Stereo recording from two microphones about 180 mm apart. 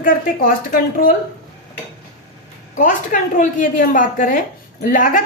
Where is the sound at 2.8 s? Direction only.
45° left (ahead or behind).